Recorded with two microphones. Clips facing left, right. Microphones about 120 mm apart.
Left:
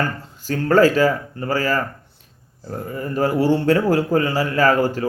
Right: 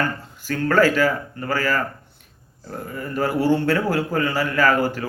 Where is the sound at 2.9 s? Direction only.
35° left (ahead or behind).